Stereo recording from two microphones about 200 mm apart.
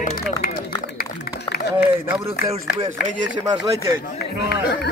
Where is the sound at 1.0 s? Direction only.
50° left (ahead or behind).